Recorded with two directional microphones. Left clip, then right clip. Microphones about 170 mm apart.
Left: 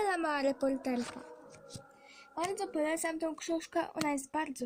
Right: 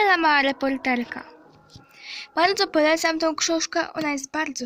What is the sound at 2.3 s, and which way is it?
Speech, 20° right (ahead or behind).